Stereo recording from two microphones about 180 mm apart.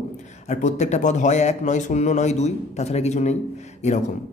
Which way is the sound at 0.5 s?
40° left (ahead or behind).